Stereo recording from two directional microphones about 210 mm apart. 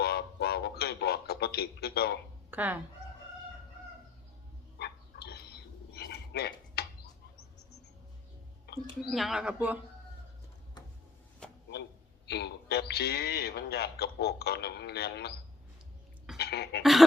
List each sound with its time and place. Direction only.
0.0 s a sound: 50° left (ahead or behind)
2.5 s speech: 10° right (ahead or behind)
4.8 s a sound: 50° left (ahead or behind)
9.0 s speech: centre (ahead or behind)
12.3 s speech: 50° left (ahead or behind)
16.4 s cough: 50° left (ahead or behind)